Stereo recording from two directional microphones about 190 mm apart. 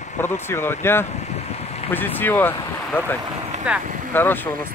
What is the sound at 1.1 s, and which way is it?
Vehicle, 35° left (ahead or behind).